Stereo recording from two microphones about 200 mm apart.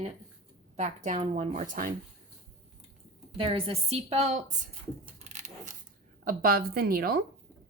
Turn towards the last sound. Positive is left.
turn(degrees=-50)  # may be behind; listen again after turning